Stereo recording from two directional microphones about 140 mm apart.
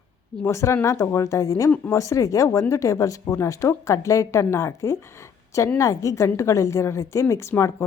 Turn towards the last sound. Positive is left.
turn(degrees=20)  # may be behind; listen again after turning